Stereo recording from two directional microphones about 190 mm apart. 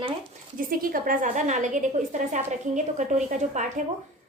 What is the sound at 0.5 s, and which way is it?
A woman's voice, 50° right (ahead or behind).